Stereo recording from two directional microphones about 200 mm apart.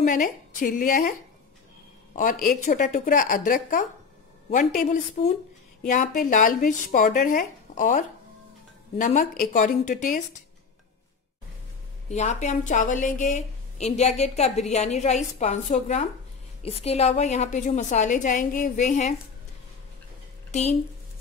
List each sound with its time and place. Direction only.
0.0 s a woman's voice: 40° left (ahead or behind)
2.4 s a woman's voice: 40° left (ahead or behind)
12.1 s speech: 35° left (ahead or behind)
20.5 s speech: 35° left (ahead or behind)